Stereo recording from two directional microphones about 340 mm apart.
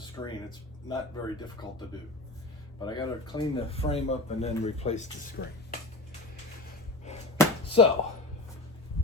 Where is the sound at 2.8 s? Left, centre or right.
Centre.